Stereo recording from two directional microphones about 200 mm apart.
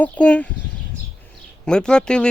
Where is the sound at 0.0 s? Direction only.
5° left (ahead or behind).